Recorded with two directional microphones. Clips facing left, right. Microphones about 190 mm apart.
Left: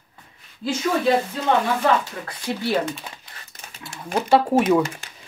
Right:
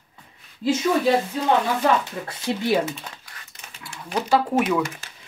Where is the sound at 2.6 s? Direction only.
10° right (ahead or behind).